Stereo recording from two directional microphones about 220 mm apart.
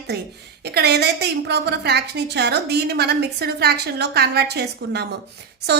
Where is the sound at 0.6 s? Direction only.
45° right (ahead or behind).